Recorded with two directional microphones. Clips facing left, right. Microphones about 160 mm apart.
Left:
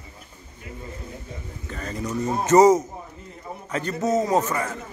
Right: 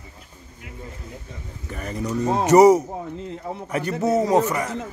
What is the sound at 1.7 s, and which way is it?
A man's voice, 15° right (ahead or behind).